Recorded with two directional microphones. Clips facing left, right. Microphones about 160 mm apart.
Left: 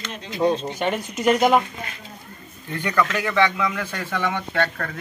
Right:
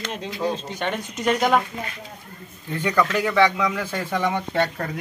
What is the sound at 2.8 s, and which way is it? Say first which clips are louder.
Speech: right 2 dB; 15° right (ahead or behind).